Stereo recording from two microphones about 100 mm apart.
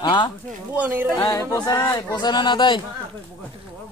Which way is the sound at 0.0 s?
50° left (ahead or behind).